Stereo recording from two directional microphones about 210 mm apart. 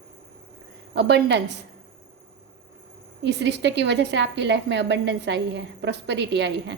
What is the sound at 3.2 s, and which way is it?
A woman's voice, 55° right (ahead or behind).